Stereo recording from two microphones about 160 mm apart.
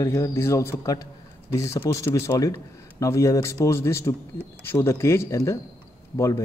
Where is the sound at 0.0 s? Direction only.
15° left (ahead or behind).